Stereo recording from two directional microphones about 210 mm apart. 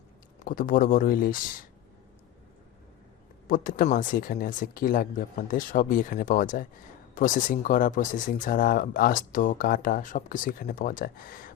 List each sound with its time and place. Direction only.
0.4 s speech: 40° left (ahead or behind)
3.4 s speech: 40° left (ahead or behind)